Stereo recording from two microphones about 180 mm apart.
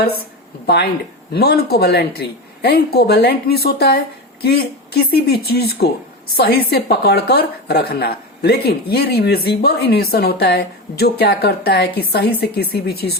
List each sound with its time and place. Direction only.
1.3 s a woman's voice: 60° left (ahead or behind)